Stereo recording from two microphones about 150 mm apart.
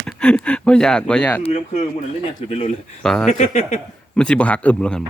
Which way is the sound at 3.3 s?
55° left (ahead or behind).